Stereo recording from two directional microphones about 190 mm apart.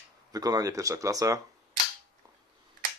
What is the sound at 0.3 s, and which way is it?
Speech, 20° right (ahead or behind).